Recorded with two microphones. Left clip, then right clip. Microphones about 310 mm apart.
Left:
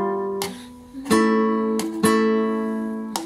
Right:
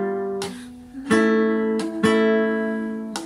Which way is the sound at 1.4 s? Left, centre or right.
Centre.